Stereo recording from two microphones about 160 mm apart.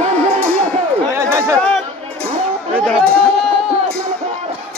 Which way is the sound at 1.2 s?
20° right (ahead or behind).